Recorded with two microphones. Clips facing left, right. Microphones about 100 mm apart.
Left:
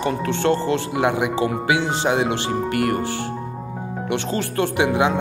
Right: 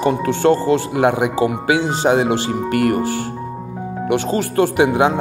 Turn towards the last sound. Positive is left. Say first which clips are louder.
# right 5 dB
turn(degrees=-45)  # may be behind; listen again after turning